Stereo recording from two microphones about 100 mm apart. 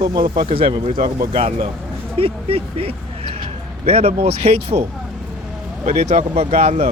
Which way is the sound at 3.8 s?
90° right.